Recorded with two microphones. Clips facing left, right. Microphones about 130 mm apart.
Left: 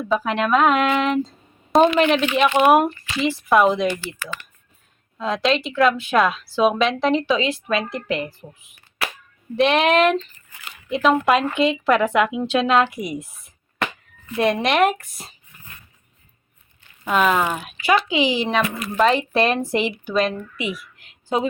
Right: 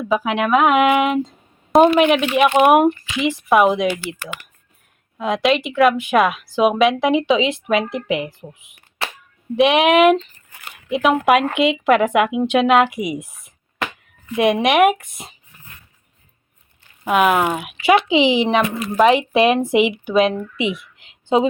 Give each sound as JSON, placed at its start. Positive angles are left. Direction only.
{"t": 0.1, "sound": "a woman's voice", "side_deg": -10}
{"t": 17.1, "sound": "speech", "side_deg": -10}
{"t": 17.7, "sound": "a woman's voice", "side_deg": -25}